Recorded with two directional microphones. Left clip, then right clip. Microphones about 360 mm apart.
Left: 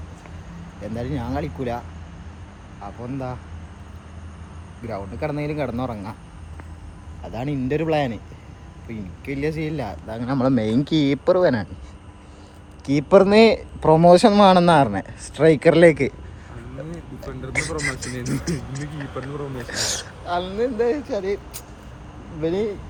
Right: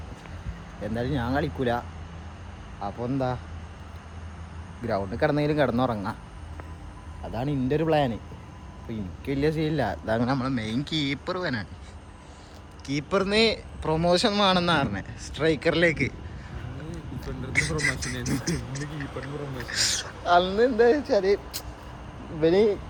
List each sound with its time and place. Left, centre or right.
0.9 s speech: centre
5.1 s speech: centre
7.3 s speech: centre
10.2 s speech: centre
12.8 s a man's voice: centre
20.2 s speech: centre